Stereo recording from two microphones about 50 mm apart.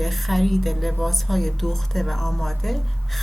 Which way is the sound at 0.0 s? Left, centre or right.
Centre.